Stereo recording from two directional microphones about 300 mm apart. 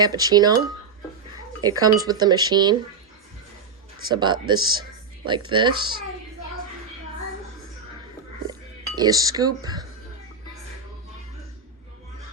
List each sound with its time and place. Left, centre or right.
0.0 s speech: centre
1.6 s speech: centre
4.1 s speech: centre
9.0 s speech: centre